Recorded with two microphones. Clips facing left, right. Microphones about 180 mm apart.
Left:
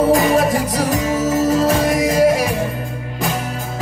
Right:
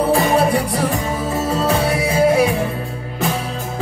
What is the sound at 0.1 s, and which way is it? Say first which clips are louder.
Music: left 1 dB; 40° left (ahead or behind).